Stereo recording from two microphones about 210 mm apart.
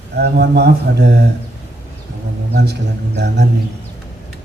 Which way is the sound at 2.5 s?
55° right (ahead or behind).